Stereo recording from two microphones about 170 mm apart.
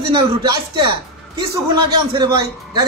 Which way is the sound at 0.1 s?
25° right (ahead or behind).